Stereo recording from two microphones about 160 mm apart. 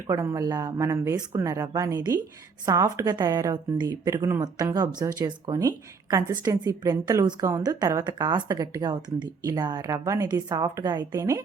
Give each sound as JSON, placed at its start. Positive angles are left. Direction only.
{"t": 0.1, "sound": "speech", "side_deg": -20}